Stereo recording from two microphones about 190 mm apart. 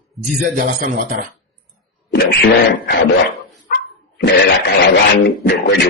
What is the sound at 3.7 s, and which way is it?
Dog, 55° left (ahead or behind).